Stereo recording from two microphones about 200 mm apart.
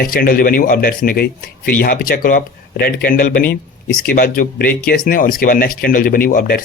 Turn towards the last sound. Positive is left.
turn(degrees=45)  # may be behind; listen again after turning